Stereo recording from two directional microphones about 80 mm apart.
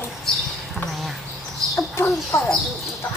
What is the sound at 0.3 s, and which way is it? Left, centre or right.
Mouse, centre.